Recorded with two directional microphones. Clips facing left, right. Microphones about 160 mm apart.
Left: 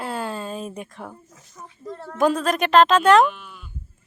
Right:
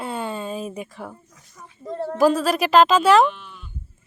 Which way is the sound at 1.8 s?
30° right (ahead or behind).